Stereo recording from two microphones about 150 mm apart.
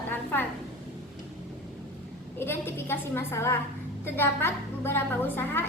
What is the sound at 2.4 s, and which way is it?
A woman's voice, 15° left (ahead or behind).